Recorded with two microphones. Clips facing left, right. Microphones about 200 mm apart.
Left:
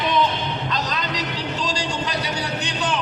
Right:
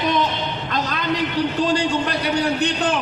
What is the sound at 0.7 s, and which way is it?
A man's voice, 55° right (ahead or behind).